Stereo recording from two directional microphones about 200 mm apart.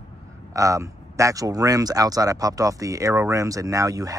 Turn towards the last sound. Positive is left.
turn(degrees=-15)  # may be behind; listen again after turning